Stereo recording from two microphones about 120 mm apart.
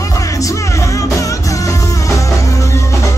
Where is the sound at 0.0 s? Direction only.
30° left (ahead or behind).